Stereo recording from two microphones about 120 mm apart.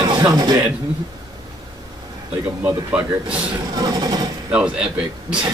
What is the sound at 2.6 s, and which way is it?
Speech, 15° right (ahead or behind).